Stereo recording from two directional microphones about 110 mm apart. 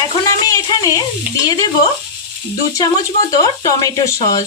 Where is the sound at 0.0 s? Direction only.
35° left (ahead or behind).